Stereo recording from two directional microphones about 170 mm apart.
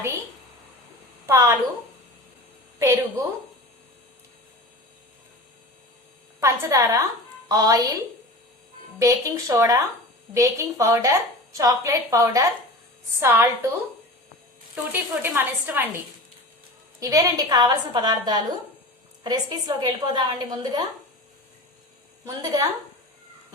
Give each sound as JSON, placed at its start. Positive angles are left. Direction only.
{"t": 1.3, "sound": "a woman's voice", "side_deg": -20}
{"t": 2.7, "sound": "a woman's voice", "side_deg": -15}
{"t": 6.4, "sound": "a woman's voice", "side_deg": -15}
{"t": 9.0, "sound": "a woman's voice", "side_deg": -20}
{"t": 14.9, "sound": "a woman's voice", "side_deg": -10}
{"t": 17.0, "sound": "a woman's voice", "side_deg": -20}
{"t": 22.2, "sound": "a woman's voice", "side_deg": -20}